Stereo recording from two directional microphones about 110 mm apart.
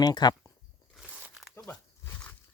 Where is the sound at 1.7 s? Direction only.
25° left (ahead or behind).